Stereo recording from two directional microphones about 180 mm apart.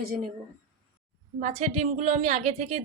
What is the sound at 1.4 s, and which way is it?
A woman's voice, 45° right (ahead or behind).